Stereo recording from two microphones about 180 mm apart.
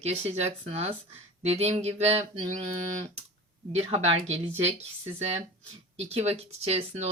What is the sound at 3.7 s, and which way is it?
Speech, 35° right (ahead or behind).